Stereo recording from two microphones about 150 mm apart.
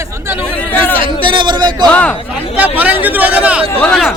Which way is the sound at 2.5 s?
10° right (ahead or behind).